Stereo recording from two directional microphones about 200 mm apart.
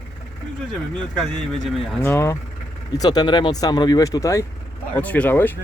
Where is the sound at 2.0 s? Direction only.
15° left (ahead or behind).